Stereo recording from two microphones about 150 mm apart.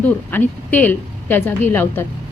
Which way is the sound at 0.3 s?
10° left (ahead or behind).